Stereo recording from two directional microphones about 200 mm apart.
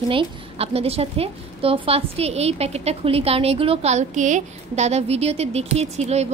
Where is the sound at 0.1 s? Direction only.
30° right (ahead or behind).